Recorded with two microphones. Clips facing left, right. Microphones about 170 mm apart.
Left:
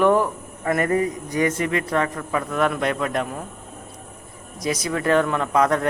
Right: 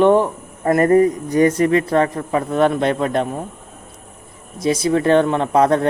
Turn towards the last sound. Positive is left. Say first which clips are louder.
# right 5 dB
turn(degrees=-30)  # may be behind; listen again after turning